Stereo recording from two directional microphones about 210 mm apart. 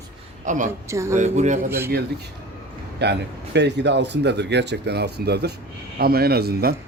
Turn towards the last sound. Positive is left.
turn(degrees=-45)  # may be behind; listen again after turning